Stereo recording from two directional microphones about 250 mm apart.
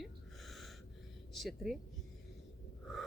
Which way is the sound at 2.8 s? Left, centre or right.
Centre.